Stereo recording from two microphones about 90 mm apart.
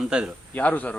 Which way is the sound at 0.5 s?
15° left (ahead or behind).